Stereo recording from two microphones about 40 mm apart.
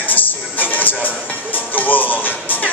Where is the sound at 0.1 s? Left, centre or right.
Left.